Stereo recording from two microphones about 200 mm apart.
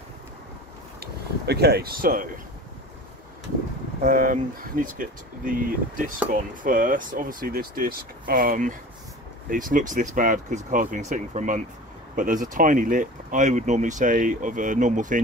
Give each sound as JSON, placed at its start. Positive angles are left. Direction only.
{"t": 1.4, "sound": "speech", "side_deg": -55}
{"t": 4.0, "sound": "speech", "side_deg": -45}